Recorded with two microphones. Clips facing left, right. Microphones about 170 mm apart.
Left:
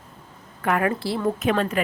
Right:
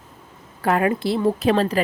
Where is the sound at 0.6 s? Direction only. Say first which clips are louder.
Right 3 dB; 25° right (ahead or behind).